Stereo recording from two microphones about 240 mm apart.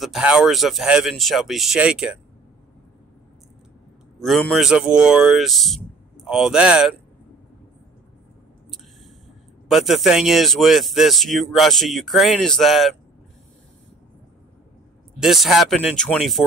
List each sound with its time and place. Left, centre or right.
0.0 s speech: centre
4.2 s speech: centre
9.7 s speech: centre
15.1 s speech: centre